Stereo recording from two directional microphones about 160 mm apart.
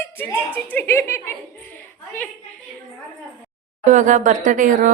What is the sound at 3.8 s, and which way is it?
Speech, 50° right (ahead or behind).